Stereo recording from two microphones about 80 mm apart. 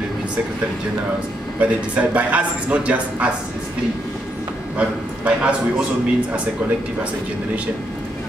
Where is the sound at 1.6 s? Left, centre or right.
Centre.